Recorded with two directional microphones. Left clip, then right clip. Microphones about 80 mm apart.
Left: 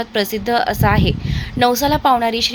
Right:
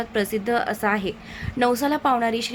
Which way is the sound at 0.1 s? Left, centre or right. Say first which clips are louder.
Left 5 dB; left.